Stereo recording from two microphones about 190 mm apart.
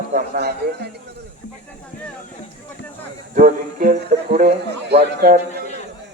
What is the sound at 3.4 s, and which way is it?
Speech, 45° right (ahead or behind).